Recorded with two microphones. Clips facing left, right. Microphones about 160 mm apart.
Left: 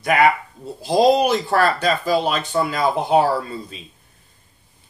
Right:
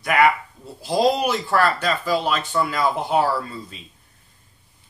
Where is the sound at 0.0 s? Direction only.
25° left (ahead or behind).